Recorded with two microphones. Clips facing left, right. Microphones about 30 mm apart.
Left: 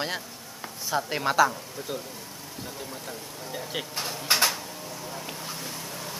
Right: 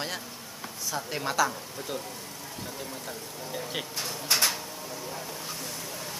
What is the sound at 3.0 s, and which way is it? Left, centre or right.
Speech, centre.